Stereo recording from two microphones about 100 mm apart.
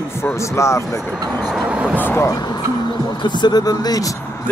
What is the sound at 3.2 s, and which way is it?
Speech, 50° left (ahead or behind).